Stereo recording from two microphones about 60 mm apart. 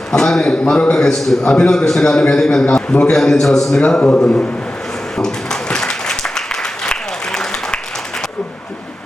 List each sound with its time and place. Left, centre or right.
0.1 s a man's voice: centre
3.8 s a man's voice: centre
5.1 s applause: centre